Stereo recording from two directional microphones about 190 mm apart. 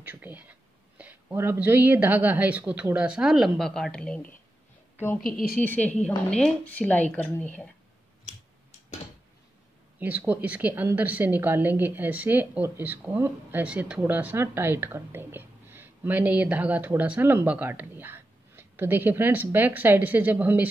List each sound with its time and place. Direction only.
0.0 s a woman's voice: 10° right (ahead or behind); by 5.2 s 10° left (ahead or behind)
5.2 s a woman's voice: 50° left (ahead or behind)
5.6 s a woman's voice: 10° left (ahead or behind)
9.9 s speech: 10° right (ahead or behind)